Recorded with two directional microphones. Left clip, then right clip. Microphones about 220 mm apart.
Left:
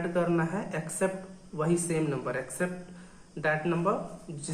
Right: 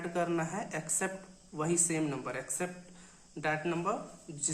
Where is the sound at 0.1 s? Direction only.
50° right (ahead or behind).